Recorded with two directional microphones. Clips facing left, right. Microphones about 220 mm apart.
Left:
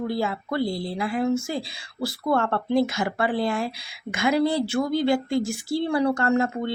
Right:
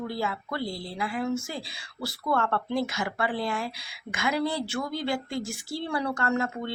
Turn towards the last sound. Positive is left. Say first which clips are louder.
# left 6 dB
turn(degrees=30)  # may be behind; listen again after turning